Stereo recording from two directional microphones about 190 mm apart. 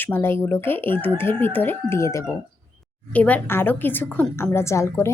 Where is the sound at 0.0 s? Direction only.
10° left (ahead or behind).